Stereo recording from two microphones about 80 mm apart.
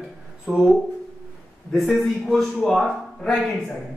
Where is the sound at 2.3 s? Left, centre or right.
Centre.